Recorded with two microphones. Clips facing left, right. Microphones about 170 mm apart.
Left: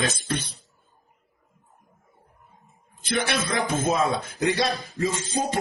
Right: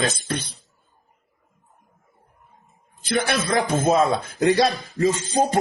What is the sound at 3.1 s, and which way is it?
Speech, 40° right (ahead or behind).